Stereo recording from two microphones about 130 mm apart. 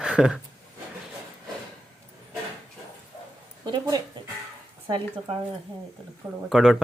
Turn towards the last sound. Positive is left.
turn(degrees=-5)  # may be behind; listen again after turning